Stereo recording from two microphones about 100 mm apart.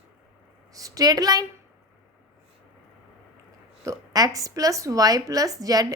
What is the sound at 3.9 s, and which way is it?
A woman's voice, 35° right (ahead or behind).